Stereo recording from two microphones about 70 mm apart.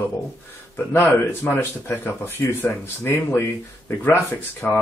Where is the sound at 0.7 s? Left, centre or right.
Left.